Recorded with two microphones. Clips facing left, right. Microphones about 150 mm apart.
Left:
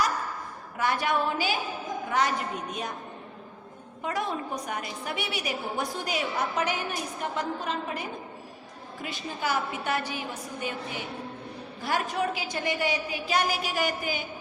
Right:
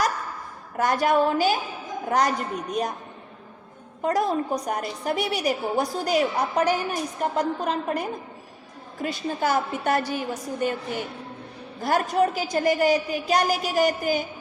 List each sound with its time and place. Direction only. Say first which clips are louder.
0.8 s a woman's voice: right 6 dB; 40° right (ahead or behind)
4.0 s a woman's voice: right 7 dB; 40° right (ahead or behind)